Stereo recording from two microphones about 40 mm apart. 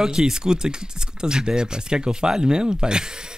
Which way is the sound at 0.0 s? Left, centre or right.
Centre.